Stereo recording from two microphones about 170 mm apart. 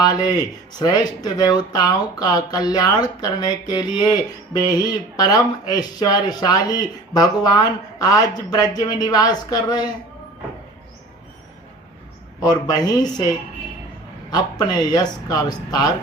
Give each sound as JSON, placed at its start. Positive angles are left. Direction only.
{"t": 0.0, "sound": "speech", "side_deg": 20}
{"t": 12.4, "sound": "speech", "side_deg": 20}
{"t": 14.3, "sound": "speech", "side_deg": 25}